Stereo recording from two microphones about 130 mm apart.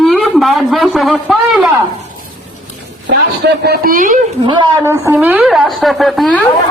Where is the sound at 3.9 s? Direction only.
90° right.